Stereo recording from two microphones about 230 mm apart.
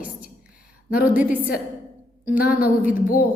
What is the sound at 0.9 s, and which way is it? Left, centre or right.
Speech, left.